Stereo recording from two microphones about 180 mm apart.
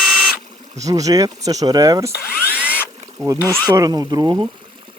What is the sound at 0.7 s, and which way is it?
Speech, 20° right (ahead or behind).